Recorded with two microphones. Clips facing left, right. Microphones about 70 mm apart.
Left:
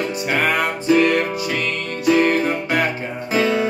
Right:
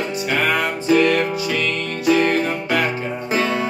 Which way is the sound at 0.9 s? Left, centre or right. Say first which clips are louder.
Even; left.